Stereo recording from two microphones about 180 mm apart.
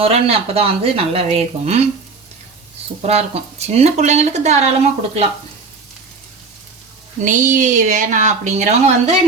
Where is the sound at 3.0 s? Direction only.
35° right (ahead or behind).